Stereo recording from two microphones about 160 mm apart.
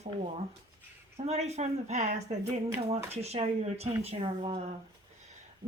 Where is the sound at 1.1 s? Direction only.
40° right (ahead or behind).